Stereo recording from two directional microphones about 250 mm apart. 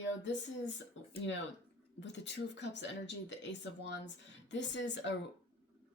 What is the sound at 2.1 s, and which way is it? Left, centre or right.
Speech, left.